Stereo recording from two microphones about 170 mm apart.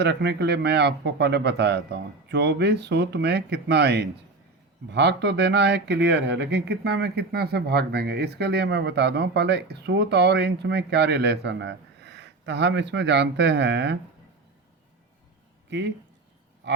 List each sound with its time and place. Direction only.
0.0 s speech: 80° right
4.9 s speech: 90° right
16.6 s speech: 90° right